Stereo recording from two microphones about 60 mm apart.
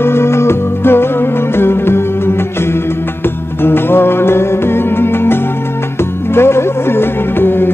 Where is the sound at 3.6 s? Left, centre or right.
Left.